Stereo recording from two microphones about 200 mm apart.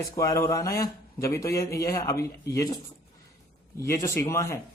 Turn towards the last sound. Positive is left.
turn(degrees=15)  # may be behind; listen again after turning